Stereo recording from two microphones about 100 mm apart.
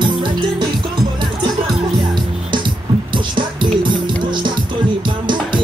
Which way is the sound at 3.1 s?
50° right (ahead or behind).